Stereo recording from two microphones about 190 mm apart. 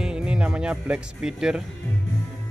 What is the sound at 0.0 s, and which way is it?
Speech, 5° right (ahead or behind).